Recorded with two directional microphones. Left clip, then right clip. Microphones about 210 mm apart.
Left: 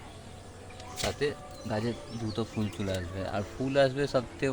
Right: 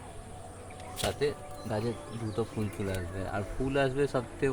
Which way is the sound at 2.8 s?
15° left (ahead or behind).